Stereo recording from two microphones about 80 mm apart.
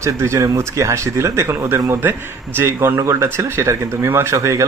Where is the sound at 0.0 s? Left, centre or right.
Right.